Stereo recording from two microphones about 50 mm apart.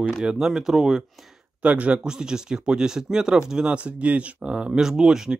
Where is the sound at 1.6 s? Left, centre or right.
Right.